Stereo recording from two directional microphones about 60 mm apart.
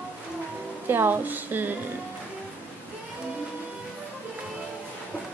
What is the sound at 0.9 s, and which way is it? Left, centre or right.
Speech, right.